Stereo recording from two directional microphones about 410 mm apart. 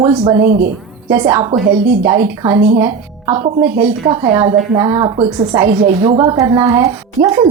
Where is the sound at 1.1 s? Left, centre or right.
Centre.